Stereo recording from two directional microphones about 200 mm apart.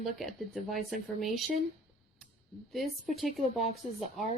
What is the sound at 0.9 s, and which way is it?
Speech, 40° left (ahead or behind).